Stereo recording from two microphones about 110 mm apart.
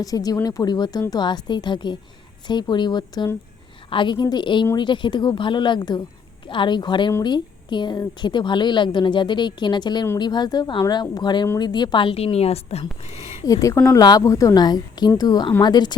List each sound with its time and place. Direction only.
0.0 s a woman's voice: 35° left (ahead or behind); by 13.3 s 75° left (ahead or behind)
13.4 s a woman's voice: 30° left (ahead or behind)